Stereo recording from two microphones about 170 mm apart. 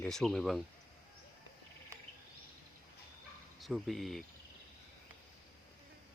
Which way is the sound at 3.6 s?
Centre (ahead or behind).